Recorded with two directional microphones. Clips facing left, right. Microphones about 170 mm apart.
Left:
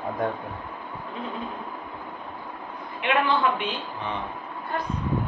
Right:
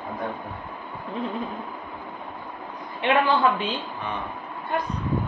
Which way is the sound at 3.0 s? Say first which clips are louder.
Right 3 dB; 30° right (ahead or behind).